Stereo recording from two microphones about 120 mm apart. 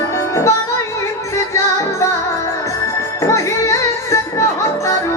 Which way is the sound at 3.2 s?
25° left (ahead or behind).